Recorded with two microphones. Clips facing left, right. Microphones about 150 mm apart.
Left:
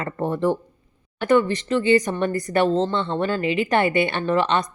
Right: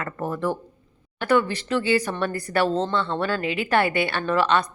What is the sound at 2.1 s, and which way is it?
A woman's voice, 20° left (ahead or behind).